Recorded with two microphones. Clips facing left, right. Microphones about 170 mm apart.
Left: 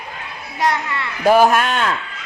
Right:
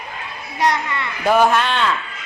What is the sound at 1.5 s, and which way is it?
Speech, 45° left (ahead or behind).